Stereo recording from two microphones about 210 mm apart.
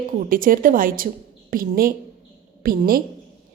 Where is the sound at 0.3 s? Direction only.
40° right (ahead or behind).